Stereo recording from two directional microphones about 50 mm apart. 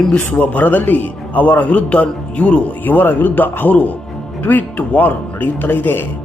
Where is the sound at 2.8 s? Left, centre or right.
Left.